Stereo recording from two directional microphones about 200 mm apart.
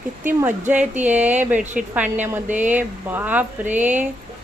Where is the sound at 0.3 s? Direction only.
10° right (ahead or behind).